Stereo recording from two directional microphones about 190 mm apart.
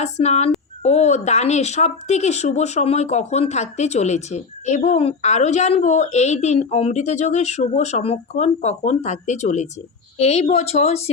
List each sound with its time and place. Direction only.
0.0 s speech: 35° left (ahead or behind)